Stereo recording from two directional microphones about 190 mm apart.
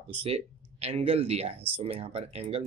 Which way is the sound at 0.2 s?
30° right (ahead or behind).